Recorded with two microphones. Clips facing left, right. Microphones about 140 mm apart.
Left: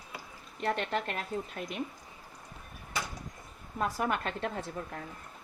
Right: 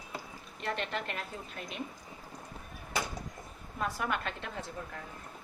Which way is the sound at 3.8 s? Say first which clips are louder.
Left 3 dB; 40° left (ahead or behind).